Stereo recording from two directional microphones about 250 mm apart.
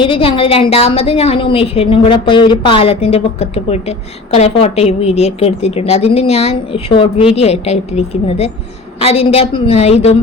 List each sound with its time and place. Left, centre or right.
0.0 s a woman's voice: left